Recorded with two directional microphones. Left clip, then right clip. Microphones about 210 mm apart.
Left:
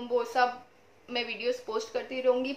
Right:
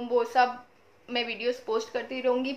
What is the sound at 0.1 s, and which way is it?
Speech, 15° right (ahead or behind).